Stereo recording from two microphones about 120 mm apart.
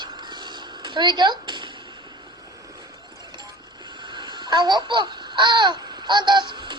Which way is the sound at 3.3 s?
40° right (ahead or behind).